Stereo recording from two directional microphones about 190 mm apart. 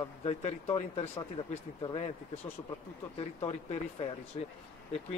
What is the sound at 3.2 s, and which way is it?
Speech, 30° left (ahead or behind).